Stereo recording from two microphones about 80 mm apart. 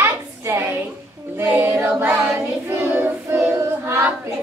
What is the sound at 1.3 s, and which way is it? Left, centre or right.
Child singing, right.